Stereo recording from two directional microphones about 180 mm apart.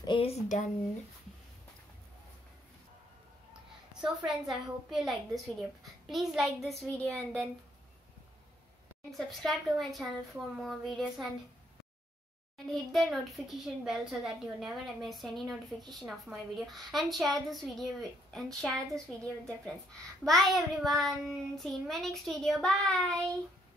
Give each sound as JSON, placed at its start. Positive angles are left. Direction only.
{"t": 0.0, "sound": "speech", "side_deg": 30}
{"t": 4.0, "sound": "speech", "side_deg": 0}
{"t": 9.1, "sound": "speech", "side_deg": 0}
{"t": 12.6, "sound": "speech", "side_deg": 0}